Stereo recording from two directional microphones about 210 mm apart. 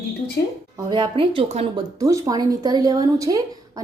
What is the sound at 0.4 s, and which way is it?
Speech, 50° left (ahead or behind).